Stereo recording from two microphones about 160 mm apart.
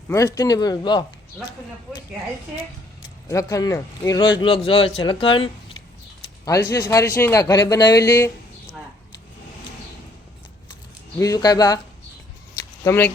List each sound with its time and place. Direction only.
0.1 s a man's voice: 20° left (ahead or behind)
3.2 s a man's voice: 20° left (ahead or behind)
6.4 s a man's voice: 20° left (ahead or behind)
11.2 s a man's voice: 20° left (ahead or behind)
12.8 s speech: 15° left (ahead or behind)